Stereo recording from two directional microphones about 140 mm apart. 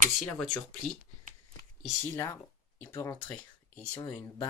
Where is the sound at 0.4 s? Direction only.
5° left (ahead or behind).